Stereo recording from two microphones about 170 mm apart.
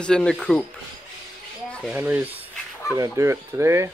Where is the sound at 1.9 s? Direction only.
10° right (ahead or behind).